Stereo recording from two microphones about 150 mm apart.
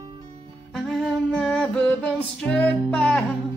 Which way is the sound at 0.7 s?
Centre (ahead or behind).